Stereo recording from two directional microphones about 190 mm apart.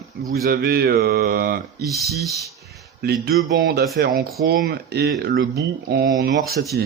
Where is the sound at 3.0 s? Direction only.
55° right (ahead or behind).